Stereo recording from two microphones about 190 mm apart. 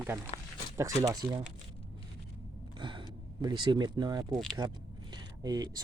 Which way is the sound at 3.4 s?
25° right (ahead or behind).